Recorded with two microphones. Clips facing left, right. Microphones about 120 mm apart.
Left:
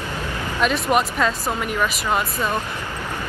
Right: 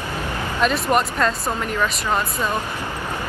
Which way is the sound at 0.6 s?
5° left (ahead or behind).